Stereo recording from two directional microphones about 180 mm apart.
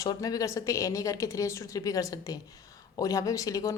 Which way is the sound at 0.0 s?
20° left (ahead or behind).